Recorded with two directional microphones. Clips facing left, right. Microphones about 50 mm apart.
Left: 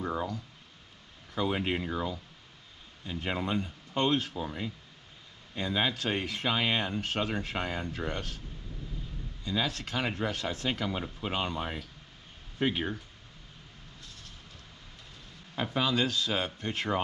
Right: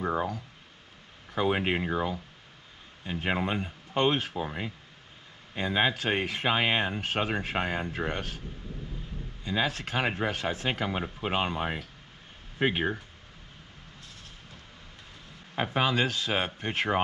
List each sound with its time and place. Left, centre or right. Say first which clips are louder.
0.0 s a sound: right 4 dB; right
1.3 s speech: right 3 dB; right
9.4 s speech: right 3 dB; right
15.5 s speech: right 3 dB; right